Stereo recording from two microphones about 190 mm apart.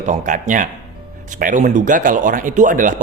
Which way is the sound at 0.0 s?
40° right (ahead or behind).